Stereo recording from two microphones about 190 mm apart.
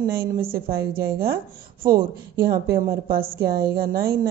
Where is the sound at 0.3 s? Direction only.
50° right (ahead or behind).